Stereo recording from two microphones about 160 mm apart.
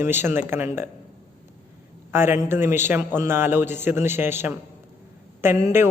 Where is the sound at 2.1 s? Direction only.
15° right (ahead or behind).